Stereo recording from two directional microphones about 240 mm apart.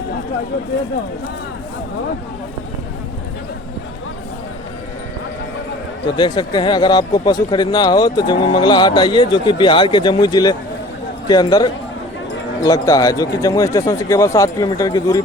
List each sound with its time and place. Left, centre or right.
6.1 s speech: centre